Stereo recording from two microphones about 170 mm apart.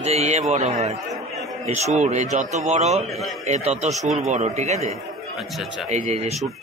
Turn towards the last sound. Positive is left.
turn(degrees=-40)  # may be behind; listen again after turning